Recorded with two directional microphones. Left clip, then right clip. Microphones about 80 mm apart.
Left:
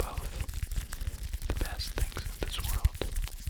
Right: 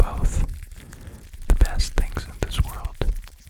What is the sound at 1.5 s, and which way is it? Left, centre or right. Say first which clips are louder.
Whispering: right 9 dB; right.